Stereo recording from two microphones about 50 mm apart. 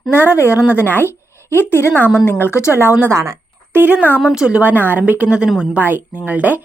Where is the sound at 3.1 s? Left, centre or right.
Right.